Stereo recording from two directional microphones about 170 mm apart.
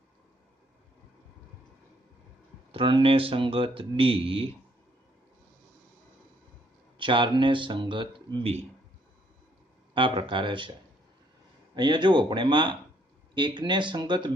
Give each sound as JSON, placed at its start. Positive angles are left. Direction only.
{"t": 2.7, "sound": "speech", "side_deg": -30}
{"t": 7.0, "sound": "speech", "side_deg": -30}
{"t": 9.9, "sound": "speech", "side_deg": -30}
{"t": 11.7, "sound": "speech", "side_deg": -25}